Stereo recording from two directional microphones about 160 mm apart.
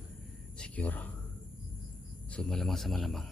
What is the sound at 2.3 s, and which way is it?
Speech, 5° left (ahead or behind).